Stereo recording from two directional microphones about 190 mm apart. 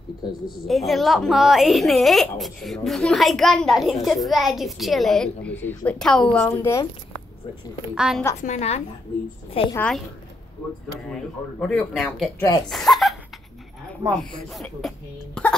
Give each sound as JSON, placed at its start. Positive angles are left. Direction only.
{"t": 0.2, "sound": "a woman's voice", "side_deg": 20}
{"t": 0.7, "sound": "a woman's voice", "side_deg": 0}
{"t": 6.4, "sound": "speech", "side_deg": 15}
{"t": 7.9, "sound": "a woman's voice", "side_deg": -5}
{"t": 8.4, "sound": "a woman's voice", "side_deg": 35}
{"t": 9.8, "sound": "a woman's voice", "side_deg": 5}
{"t": 11.6, "sound": "a woman's voice", "side_deg": 0}
{"t": 12.4, "sound": "a woman's voice", "side_deg": 20}
{"t": 12.6, "sound": "speech", "side_deg": 0}
{"t": 14.5, "sound": "speech", "side_deg": 0}